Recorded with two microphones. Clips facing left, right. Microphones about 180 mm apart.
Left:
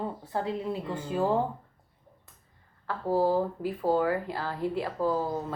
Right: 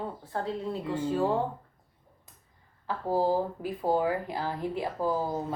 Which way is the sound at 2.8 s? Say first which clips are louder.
Left 1 dB; 15° right (ahead or behind).